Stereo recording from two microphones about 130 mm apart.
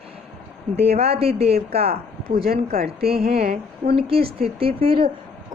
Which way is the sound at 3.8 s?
45° right (ahead or behind).